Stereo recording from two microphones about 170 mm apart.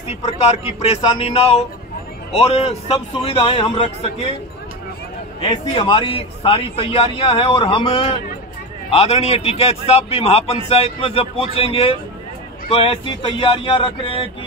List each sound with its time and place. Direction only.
0.2 s a man's voice: 35° left (ahead or behind)
5.4 s a man's voice: 30° left (ahead or behind)